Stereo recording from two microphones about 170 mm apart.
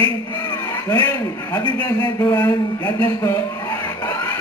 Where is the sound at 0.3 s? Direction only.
20° left (ahead or behind).